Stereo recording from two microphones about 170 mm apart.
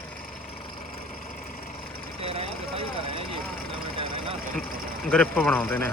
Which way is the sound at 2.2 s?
35° right (ahead or behind).